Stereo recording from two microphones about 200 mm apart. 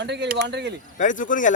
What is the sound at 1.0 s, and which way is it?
Speech, 40° left (ahead or behind).